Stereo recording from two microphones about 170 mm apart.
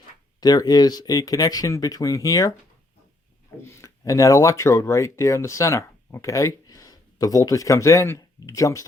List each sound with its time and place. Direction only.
0.3 s speech: 25° left (ahead or behind)
3.8 s speech: 20° left (ahead or behind)